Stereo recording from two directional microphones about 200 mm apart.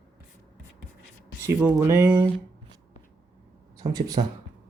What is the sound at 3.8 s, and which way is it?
Speech, 20° right (ahead or behind).